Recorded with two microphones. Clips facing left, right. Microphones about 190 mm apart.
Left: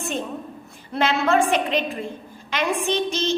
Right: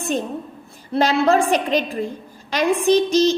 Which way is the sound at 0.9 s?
35° right (ahead or behind).